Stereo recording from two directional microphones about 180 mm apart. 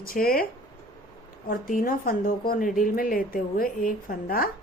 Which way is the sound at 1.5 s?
50° left (ahead or behind).